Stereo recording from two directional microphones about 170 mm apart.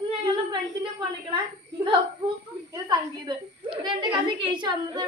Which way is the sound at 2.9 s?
25° right (ahead or behind).